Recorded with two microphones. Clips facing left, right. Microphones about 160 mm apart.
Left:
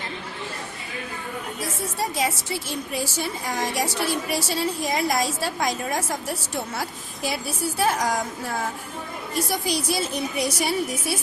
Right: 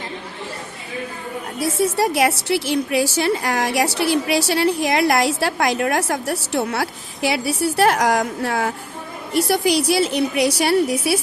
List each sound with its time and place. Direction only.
1.6 s a woman's voice: 75° right (ahead or behind)